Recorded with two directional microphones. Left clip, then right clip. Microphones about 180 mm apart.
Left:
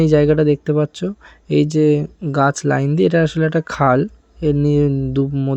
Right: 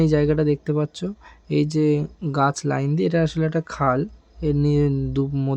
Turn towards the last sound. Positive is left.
turn(degrees=10)  # may be behind; listen again after turning